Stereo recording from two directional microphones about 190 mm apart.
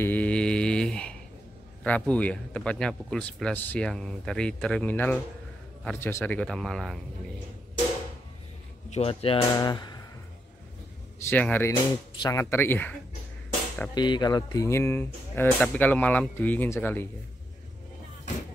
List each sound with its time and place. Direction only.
0.0 s mantra: 10° left (ahead or behind)
1.8 s speech: 5° left (ahead or behind)
8.9 s speech: 30° left (ahead or behind)
11.2 s speech: 10° left (ahead or behind)
13.9 s speech: 20° left (ahead or behind)